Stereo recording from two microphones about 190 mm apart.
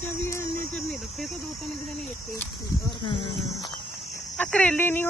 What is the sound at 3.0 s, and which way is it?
Speech, 25° left (ahead or behind).